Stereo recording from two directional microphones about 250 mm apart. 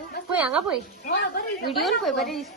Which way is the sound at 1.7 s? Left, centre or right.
Centre.